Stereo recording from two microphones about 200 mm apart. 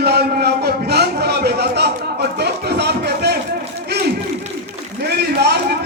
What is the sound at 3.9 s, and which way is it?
Crowd, 55° right (ahead or behind).